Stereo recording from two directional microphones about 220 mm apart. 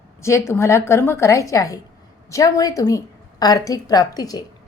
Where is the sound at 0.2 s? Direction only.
10° left (ahead or behind).